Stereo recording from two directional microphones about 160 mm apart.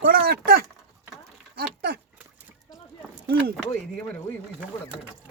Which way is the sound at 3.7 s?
10° left (ahead or behind).